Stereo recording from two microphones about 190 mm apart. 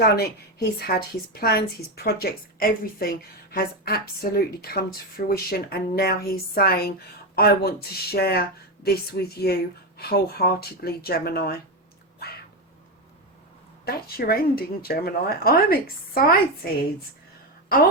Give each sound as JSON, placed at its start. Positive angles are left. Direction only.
{"t": 0.0, "sound": "a woman's voice", "side_deg": 55}
{"t": 13.8, "sound": "a woman's voice", "side_deg": 55}